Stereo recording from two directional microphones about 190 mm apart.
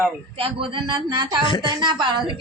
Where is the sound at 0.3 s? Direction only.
30° right (ahead or behind).